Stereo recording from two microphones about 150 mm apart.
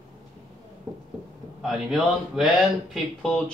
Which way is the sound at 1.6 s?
5° right (ahead or behind).